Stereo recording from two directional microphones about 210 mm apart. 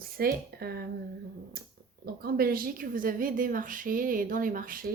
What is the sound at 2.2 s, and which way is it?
A woman's voice, 45° right (ahead or behind).